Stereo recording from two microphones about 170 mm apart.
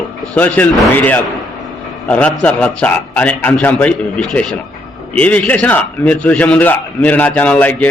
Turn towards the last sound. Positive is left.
turn(degrees=10)  # may be behind; listen again after turning